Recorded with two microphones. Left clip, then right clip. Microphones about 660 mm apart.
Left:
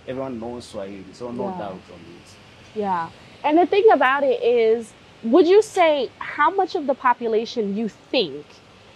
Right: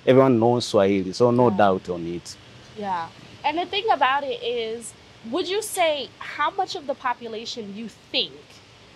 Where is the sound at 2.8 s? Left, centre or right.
Left.